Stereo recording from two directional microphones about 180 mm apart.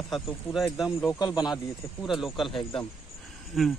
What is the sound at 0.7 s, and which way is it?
Speech, centre (ahead or behind).